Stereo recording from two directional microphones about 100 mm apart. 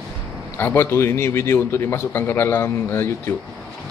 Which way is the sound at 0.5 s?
25° left (ahead or behind).